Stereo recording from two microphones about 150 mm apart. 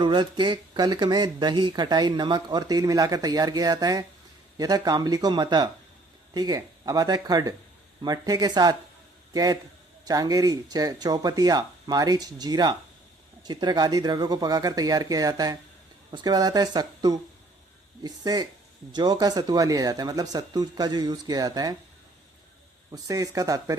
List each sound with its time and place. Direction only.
0.0 s a man's voice: 30° right (ahead or behind)
22.9 s speech: 25° right (ahead or behind)